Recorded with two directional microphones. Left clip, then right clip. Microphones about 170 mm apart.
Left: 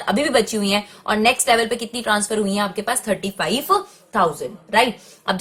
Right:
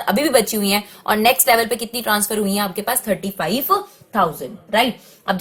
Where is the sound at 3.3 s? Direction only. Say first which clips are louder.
Even; 10° right (ahead or behind).